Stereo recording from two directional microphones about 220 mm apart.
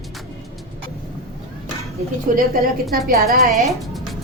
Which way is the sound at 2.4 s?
45° right (ahead or behind).